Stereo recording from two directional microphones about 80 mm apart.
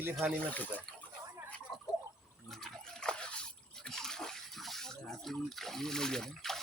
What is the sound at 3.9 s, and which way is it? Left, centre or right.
Bathtub, centre.